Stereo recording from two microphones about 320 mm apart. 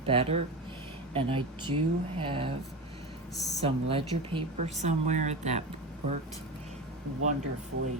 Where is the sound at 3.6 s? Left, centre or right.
Centre.